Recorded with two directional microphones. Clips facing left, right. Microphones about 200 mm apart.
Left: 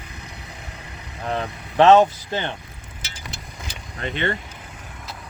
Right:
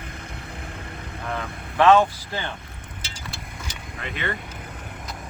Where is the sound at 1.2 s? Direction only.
20° left (ahead or behind).